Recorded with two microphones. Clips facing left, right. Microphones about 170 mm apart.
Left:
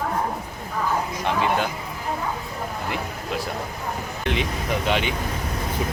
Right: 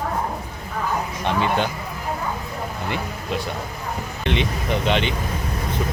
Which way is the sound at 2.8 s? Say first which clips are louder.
Right 2 dB; centre (ahead or behind).